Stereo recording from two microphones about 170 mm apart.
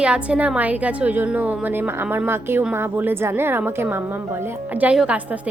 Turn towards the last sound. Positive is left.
turn(degrees=-10)  # may be behind; listen again after turning